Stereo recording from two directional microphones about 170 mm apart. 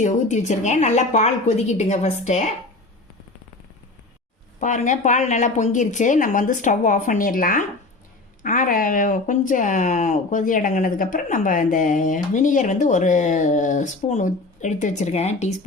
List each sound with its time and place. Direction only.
0.0 s speech: 45° left (ahead or behind)
4.6 s speech: 45° left (ahead or behind)